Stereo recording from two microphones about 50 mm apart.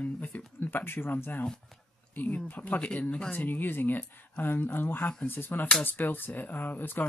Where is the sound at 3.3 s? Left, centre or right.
Left.